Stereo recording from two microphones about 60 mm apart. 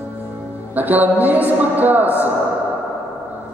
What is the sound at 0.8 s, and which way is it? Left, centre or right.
A man's voice, right.